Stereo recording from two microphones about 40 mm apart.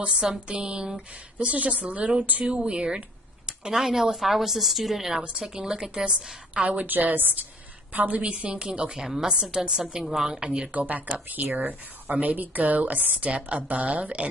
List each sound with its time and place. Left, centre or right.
0.1 s a sound: centre
1.4 s a woman's voice: right
2.4 s a sound: right
3.4 s speech: centre
5.5 s speech: centre
6.5 s a woman's voice: right
6.9 s a woman's voice: right
7.9 s a woman's voice: right
8.3 s a sound: right
9.0 s speech: centre
10.4 s a sound: right
10.7 s a woman's voice: right